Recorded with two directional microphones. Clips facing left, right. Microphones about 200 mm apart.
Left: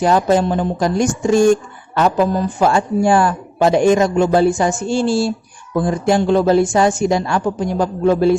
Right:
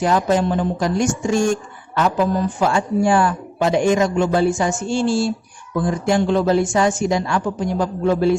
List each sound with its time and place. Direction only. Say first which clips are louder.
0.0 s a man's voice: left 3 dB; 35° left (ahead or behind)
2.6 s a man's voice: left 5 dB; 40° left (ahead or behind)